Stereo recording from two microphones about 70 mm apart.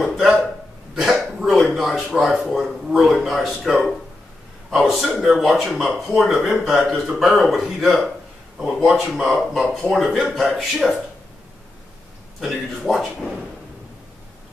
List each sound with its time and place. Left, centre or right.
0.0 s a sound: centre
0.9 s cough: centre
2.0 s speech: centre
12.4 s speech: centre